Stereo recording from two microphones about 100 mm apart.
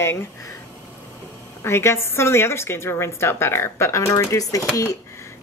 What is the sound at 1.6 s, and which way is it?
A woman's voice, 25° left (ahead or behind).